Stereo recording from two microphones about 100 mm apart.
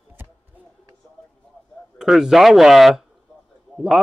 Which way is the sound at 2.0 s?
5° right (ahead or behind).